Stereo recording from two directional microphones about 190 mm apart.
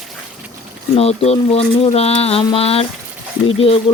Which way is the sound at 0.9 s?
35° left (ahead or behind).